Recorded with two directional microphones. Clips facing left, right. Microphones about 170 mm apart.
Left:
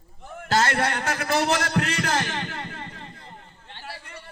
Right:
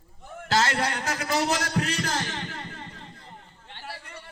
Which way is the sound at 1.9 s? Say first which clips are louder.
Left 4 dB; 80° left.